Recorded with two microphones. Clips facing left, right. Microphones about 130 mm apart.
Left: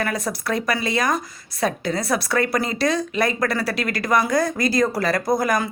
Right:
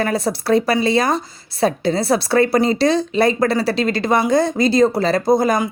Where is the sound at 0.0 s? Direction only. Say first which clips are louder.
Right 5 dB; 30° right (ahead or behind).